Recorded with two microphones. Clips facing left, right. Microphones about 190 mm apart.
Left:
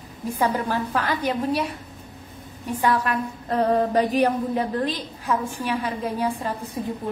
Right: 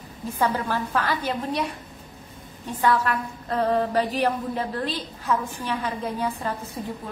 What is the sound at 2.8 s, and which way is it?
Mantra, 15° left (ahead or behind).